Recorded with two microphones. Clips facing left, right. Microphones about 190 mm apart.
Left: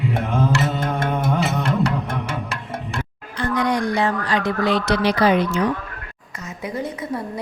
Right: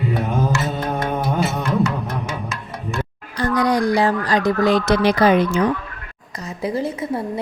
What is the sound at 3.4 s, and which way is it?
Speech, 35° right (ahead or behind).